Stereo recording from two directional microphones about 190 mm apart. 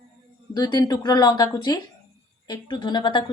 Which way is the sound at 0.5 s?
20° left (ahead or behind).